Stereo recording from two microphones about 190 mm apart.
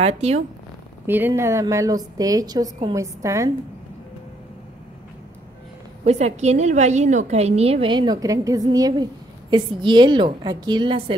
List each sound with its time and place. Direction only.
0.0 s a woman's voice: 35° right (ahead or behind)
1.0 s a woman's voice: 10° right (ahead or behind)
6.0 s a woman's voice: 35° right (ahead or behind)